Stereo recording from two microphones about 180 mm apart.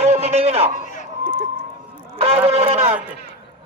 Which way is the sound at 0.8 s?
45° left (ahead or behind).